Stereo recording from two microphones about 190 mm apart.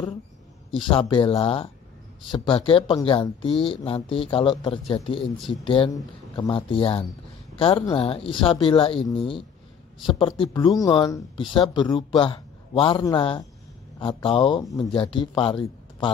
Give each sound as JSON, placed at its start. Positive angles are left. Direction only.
{"t": 0.7, "sound": "speech", "side_deg": 25}